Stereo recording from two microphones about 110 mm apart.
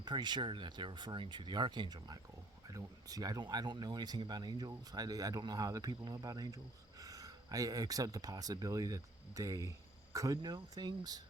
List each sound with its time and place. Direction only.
0.0 s speech: 40° right (ahead or behind)